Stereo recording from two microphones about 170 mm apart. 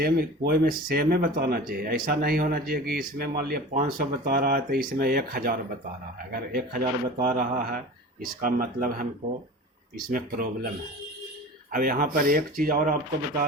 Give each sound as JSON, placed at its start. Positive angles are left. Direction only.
{"t": 0.0, "sound": "speech", "side_deg": -60}
{"t": 10.1, "sound": "speech", "side_deg": -55}
{"t": 11.7, "sound": "speech", "side_deg": -55}